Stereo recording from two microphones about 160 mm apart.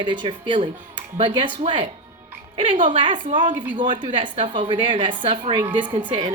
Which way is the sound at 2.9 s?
30° right (ahead or behind).